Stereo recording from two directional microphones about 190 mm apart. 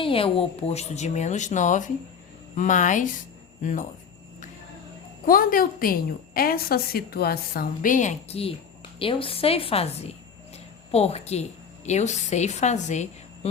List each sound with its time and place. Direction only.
0.0 s a woman's voice: 30° left (ahead or behind)
5.2 s a woman's voice: 45° left (ahead or behind)